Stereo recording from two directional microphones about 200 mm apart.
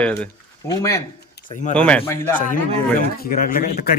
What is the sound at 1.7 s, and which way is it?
Speech, 5° left (ahead or behind).